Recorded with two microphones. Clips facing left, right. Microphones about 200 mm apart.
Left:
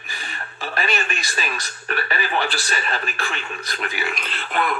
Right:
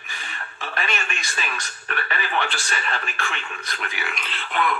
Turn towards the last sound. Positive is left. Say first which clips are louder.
# left 1 dB
turn(degrees=40)  # may be behind; listen again after turning